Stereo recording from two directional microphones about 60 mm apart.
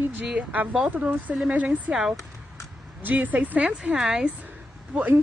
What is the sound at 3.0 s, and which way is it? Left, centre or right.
Speech, right.